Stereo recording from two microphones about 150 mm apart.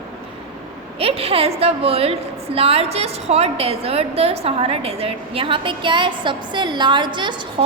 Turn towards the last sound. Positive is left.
turn(degrees=-30)  # may be behind; listen again after turning